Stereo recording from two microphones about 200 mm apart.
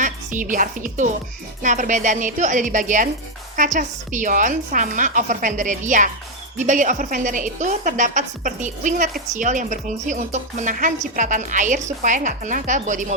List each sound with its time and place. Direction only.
0.0 s a woman's voice: 40° right (ahead or behind)